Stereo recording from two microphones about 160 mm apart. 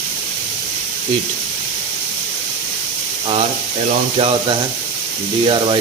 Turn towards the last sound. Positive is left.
turn(degrees=-30)  # may be behind; listen again after turning